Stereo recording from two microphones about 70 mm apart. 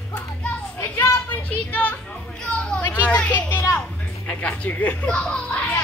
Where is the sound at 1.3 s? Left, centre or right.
Left.